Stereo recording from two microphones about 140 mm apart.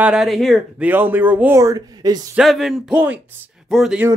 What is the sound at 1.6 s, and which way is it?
Speech, 25° right (ahead or behind).